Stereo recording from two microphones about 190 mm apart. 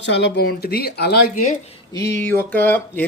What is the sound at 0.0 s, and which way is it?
Speech, 65° left (ahead or behind).